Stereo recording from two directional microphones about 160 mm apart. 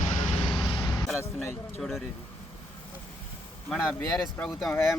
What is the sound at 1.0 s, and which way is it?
Speech, centre (ahead or behind).